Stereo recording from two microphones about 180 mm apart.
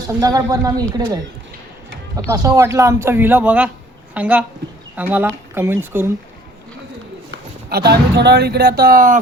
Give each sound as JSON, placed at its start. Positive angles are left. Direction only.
{"t": 0.2, "sound": "speech", "side_deg": -20}
{"t": 7.3, "sound": "speech", "side_deg": -60}